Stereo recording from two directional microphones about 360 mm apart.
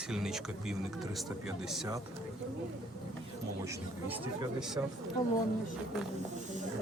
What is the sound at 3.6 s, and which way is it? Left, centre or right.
Speech, centre.